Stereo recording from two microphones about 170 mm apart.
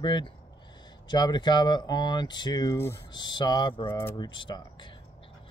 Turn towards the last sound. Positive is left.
turn(degrees=30)  # may be behind; listen again after turning